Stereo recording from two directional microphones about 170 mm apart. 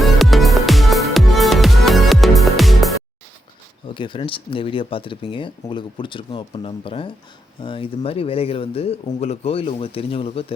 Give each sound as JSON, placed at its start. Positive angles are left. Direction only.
{"t": 0.0, "sound": "music", "side_deg": 0}
{"t": 3.9, "sound": "speech", "side_deg": 30}